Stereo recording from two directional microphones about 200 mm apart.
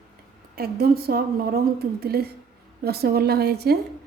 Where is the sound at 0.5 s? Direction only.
50° right (ahead or behind).